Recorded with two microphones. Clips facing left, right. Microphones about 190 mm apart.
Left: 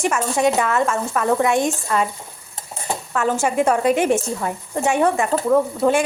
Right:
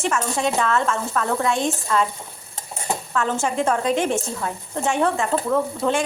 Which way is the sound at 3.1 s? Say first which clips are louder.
Left 4 dB; 10° left (ahead or behind).